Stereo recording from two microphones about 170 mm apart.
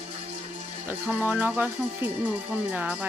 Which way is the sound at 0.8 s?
10° right (ahead or behind).